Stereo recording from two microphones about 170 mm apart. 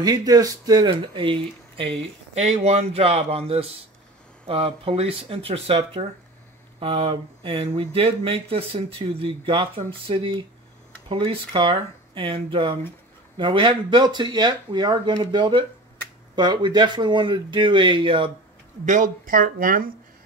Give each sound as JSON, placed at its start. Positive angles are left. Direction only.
{"t": 0.0, "sound": "speech", "side_deg": -25}
{"t": 18.9, "sound": "speech", "side_deg": -50}